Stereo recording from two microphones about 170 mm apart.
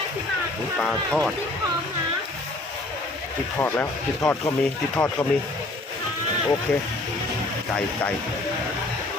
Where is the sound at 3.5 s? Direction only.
10° left (ahead or behind).